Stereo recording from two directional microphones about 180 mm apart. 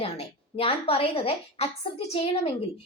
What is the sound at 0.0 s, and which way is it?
A woman's voice, 30° left (ahead or behind).